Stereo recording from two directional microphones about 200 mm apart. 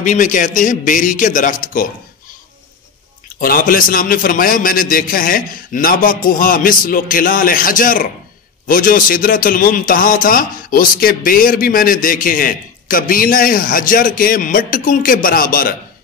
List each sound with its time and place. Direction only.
0.0 s a man's voice: 40° left (ahead or behind)
3.3 s a man's voice: 45° left (ahead or behind)